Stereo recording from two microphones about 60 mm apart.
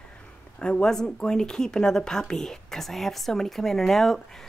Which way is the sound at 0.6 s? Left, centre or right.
Centre.